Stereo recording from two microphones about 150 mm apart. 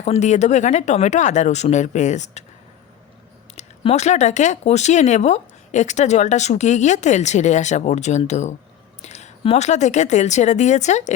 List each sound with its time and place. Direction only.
0.0 s speech: 50° left (ahead or behind)
3.5 s speech: 45° left (ahead or behind)